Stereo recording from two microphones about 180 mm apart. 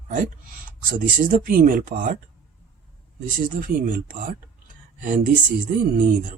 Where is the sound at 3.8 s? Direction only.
50° right (ahead or behind).